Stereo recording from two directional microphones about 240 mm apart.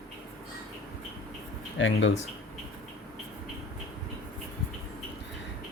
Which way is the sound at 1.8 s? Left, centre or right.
Left.